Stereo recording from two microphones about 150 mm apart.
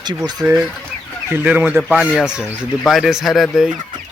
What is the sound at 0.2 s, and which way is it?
Speech, 25° right (ahead or behind).